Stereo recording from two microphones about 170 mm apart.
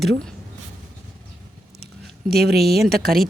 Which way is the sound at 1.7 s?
75° right (ahead or behind).